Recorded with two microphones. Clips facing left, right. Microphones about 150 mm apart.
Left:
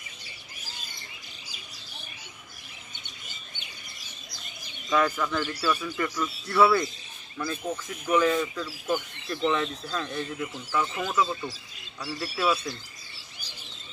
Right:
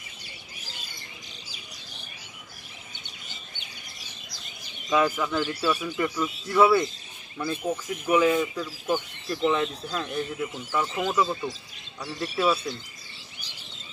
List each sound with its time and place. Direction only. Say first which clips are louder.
4.8 s speech: right 1 dB; 10° right (ahead or behind)
12.0 s speech: right 3 dB; 5° left (ahead or behind)